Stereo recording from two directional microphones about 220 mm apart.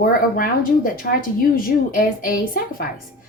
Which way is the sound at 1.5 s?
40° left (ahead or behind).